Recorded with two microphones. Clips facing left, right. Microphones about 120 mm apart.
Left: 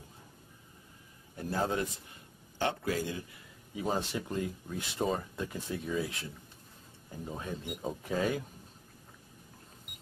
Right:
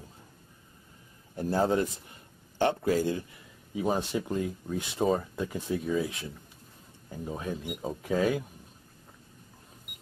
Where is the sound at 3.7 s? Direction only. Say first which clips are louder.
Right 4 dB; 15° right (ahead or behind).